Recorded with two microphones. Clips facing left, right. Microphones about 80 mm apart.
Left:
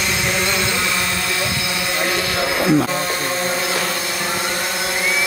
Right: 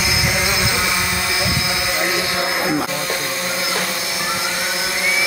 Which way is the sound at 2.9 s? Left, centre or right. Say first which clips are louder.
Left 2 dB; left.